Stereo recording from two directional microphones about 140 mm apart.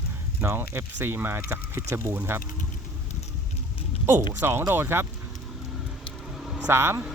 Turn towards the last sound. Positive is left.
turn(degrees=-20)  # may be behind; listen again after turning